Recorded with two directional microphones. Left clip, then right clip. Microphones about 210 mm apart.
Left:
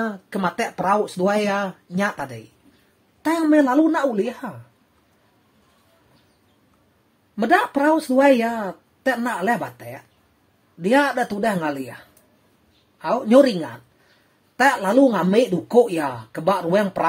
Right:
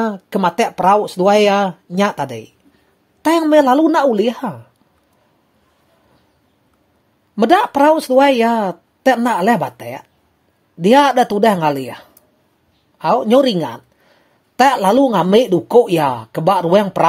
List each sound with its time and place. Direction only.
0.0 s speech: 25° right (ahead or behind)
7.3 s speech: 25° right (ahead or behind)